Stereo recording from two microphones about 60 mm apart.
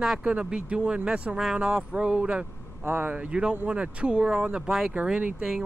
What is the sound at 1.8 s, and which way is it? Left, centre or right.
Speech, centre.